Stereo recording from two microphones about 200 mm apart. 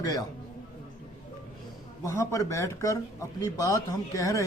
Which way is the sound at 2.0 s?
15° left (ahead or behind).